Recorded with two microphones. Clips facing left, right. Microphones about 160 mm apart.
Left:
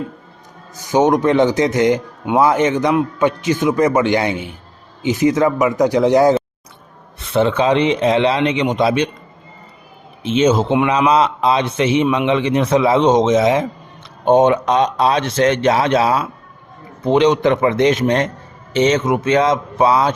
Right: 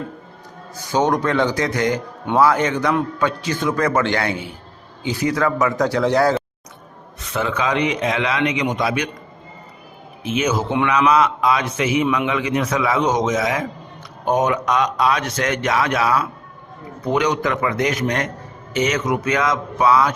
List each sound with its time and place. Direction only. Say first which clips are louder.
0.8 s speech: left 5 dB; 15° left (ahead or behind)
7.2 s speech: left 7 dB; 30° left (ahead or behind)
10.2 s speech: left 6 dB; 25° left (ahead or behind)